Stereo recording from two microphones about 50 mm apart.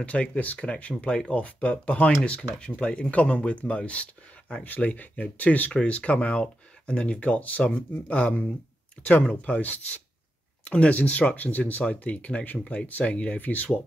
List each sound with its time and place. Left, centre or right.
0.0 s speech: left
4.6 s speech: left